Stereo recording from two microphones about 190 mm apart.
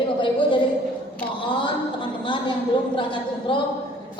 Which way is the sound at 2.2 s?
25° left (ahead or behind).